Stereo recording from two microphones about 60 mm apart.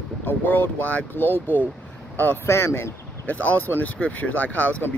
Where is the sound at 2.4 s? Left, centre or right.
Left.